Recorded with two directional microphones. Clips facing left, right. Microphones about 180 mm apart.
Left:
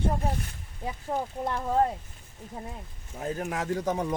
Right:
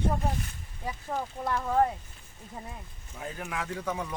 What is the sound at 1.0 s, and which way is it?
Speech, 20° left (ahead or behind).